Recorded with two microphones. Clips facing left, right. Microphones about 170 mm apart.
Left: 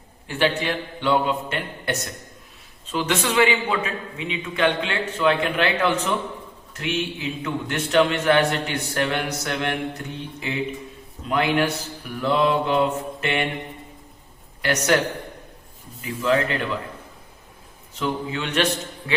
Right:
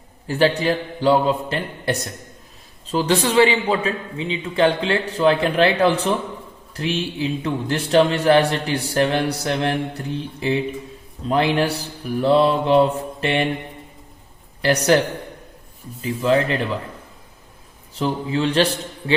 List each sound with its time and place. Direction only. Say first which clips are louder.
0.3 s a man's voice: right 5 dB; 40° right (ahead or behind)
14.6 s a man's voice: right 5 dB; 30° right (ahead or behind)
16.0 s a man's voice: right 3 dB; 35° right (ahead or behind)
17.9 s a man's voice: right 4 dB; 35° right (ahead or behind)